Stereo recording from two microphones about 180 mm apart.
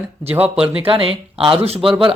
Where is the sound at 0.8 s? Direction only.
30° right (ahead or behind).